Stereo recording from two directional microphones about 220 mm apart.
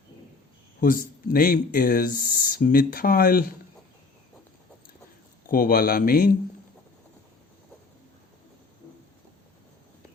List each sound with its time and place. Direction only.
0.8 s speech: 40° left (ahead or behind)
5.5 s speech: 40° left (ahead or behind)